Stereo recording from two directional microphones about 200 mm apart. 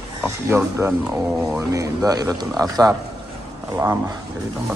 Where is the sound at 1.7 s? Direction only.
15° right (ahead or behind).